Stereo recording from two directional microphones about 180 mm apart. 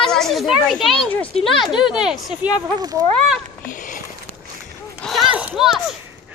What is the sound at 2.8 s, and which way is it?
Speech, 20° right (ahead or behind).